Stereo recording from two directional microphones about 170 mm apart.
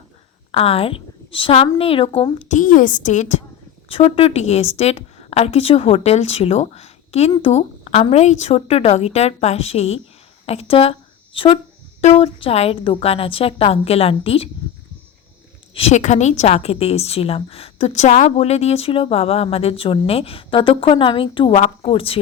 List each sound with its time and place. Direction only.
0.5 s a woman's voice: 35° left (ahead or behind)
2.4 s a woman's voice: 45° left (ahead or behind)
3.8 s a woman's voice: 35° left (ahead or behind)
11.3 s a sound: 30° left (ahead or behind)
12.0 s a woman's voice: 35° left (ahead or behind)
15.7 s a woman's voice: 40° left (ahead or behind)